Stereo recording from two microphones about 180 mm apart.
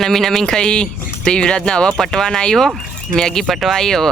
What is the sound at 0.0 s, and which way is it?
Speech, centre (ahead or behind).